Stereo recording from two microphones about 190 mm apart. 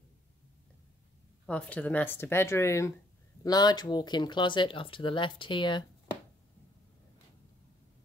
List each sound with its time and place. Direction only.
1.4 s speech: 5° left (ahead or behind); by 5.9 s 25° left (ahead or behind)